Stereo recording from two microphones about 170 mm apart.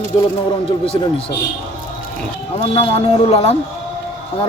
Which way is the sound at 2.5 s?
35° left (ahead or behind).